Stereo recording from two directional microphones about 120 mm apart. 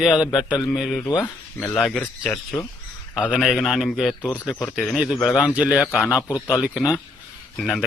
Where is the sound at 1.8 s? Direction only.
5° left (ahead or behind).